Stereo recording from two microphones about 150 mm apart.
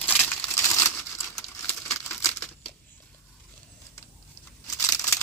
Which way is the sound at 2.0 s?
15° left (ahead or behind).